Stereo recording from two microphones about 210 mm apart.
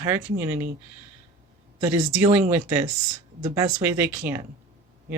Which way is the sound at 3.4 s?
15° right (ahead or behind).